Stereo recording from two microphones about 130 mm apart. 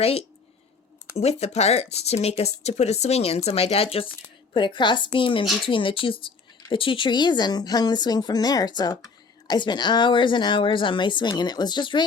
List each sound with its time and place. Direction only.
0.0 s speech: 50° left (ahead or behind)
4.5 s a woman's voice: 35° left (ahead or behind)